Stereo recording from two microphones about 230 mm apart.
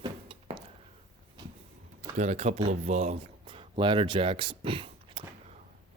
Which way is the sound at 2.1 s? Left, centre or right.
Right.